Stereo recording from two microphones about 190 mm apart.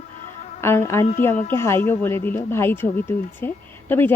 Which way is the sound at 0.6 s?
15° left (ahead or behind).